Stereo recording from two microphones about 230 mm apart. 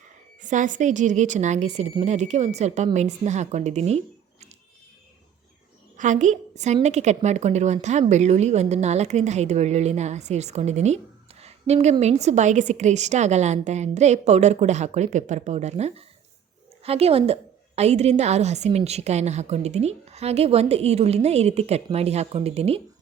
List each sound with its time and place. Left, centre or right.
0.4 s a woman's voice: right
6.0 s a woman's voice: right